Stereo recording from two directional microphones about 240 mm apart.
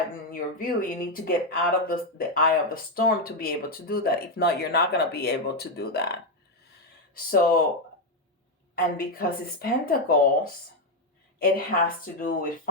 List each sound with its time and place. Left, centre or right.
0.3 s speech: left
8.7 s speech: left
11.3 s speech: left